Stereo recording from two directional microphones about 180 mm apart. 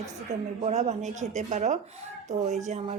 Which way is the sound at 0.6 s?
40° right (ahead or behind).